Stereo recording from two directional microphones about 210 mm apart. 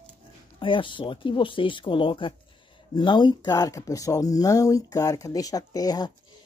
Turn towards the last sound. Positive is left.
turn(degrees=15)  # may be behind; listen again after turning